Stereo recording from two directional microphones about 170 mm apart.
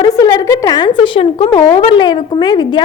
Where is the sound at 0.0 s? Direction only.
25° left (ahead or behind).